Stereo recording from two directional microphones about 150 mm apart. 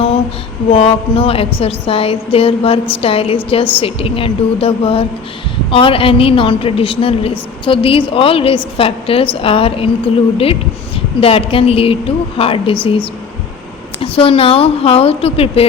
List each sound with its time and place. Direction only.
0.7 s a woman's voice: 40° left (ahead or behind)
14.0 s a woman's voice: 40° left (ahead or behind)